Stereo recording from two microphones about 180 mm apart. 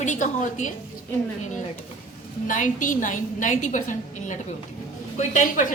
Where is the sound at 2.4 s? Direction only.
45° left (ahead or behind).